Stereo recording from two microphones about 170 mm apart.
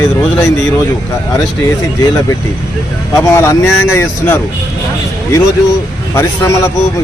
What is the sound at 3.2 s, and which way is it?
Speech, 15° left (ahead or behind).